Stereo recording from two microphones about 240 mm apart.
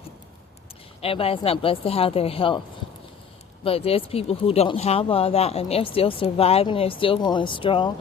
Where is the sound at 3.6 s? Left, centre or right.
Left.